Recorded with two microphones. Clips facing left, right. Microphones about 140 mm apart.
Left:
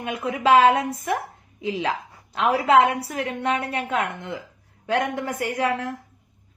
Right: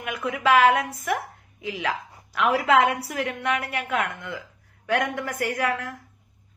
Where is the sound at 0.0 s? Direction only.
25° left (ahead or behind).